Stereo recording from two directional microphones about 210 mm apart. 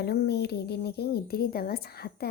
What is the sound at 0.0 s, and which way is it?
A woman's voice, 50° left (ahead or behind).